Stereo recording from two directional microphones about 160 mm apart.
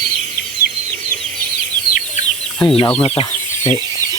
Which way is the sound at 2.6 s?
30° left (ahead or behind).